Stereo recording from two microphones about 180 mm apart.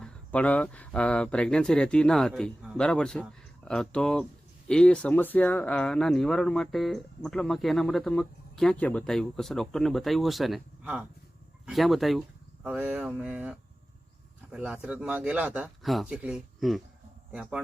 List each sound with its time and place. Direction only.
0.0 s speech: 5° left (ahead or behind)